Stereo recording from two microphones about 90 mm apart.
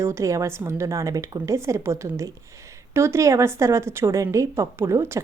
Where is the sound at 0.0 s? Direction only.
30° right (ahead or behind).